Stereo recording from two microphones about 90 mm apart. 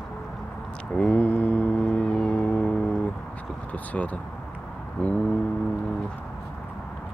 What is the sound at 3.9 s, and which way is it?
Speech, 15° left (ahead or behind).